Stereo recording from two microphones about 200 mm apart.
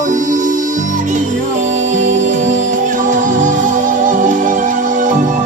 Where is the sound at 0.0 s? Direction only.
40° right (ahead or behind).